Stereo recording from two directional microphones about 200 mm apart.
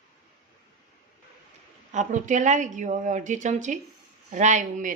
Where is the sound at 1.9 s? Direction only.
35° right (ahead or behind).